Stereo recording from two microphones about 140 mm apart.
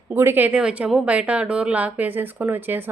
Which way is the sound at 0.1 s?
15° right (ahead or behind).